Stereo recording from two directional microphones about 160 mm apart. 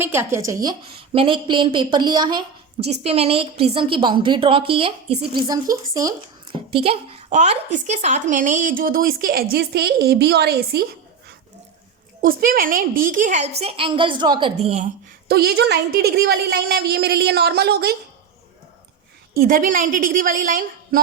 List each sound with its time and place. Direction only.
0.0 s a woman's voice: 15° right (ahead or behind)
2.8 s a woman's voice: 40° right (ahead or behind); by 6.6 s 20° right (ahead or behind)
6.7 s a woman's voice: 35° right (ahead or behind); by 10.8 s 80° right
12.2 s a woman's voice: 60° right (ahead or behind); by 14.8 s 40° right (ahead or behind)
15.3 s a woman's voice: 80° right
19.3 s a woman's voice: 60° right (ahead or behind)